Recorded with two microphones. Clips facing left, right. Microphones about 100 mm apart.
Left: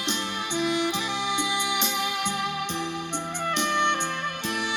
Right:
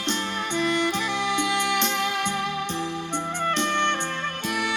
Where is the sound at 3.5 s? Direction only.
15° left (ahead or behind).